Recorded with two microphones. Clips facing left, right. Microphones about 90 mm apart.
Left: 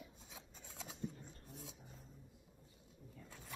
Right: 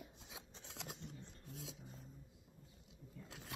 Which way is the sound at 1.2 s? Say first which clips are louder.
Right 1 dB; 90° right.